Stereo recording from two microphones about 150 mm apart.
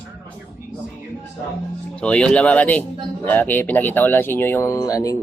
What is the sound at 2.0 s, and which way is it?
Speech, 5° left (ahead or behind).